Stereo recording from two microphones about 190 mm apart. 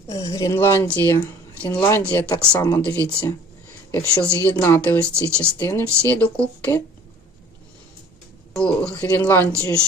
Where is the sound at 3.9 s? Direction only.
15° left (ahead or behind).